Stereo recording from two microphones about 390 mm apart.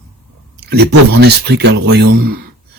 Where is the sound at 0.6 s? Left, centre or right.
Right.